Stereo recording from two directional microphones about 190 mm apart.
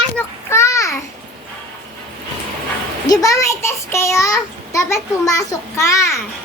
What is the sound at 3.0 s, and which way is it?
A child's voice, 20° left (ahead or behind).